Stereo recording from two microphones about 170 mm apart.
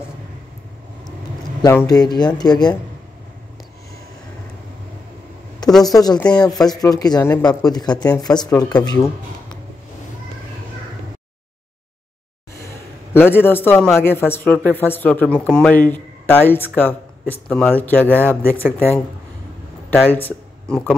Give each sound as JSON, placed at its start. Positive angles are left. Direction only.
{"t": 1.6, "sound": "speech", "side_deg": 20}
{"t": 5.9, "sound": "speech", "side_deg": 20}
{"t": 6.1, "sound": "speech", "side_deg": 5}
{"t": 6.6, "sound": "speech", "side_deg": 20}
{"t": 13.1, "sound": "speech", "side_deg": 15}